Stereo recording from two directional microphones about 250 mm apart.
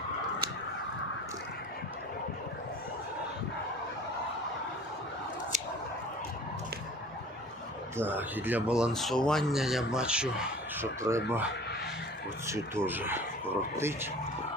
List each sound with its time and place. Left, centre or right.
7.9 s speech: centre
12.5 s speech: centre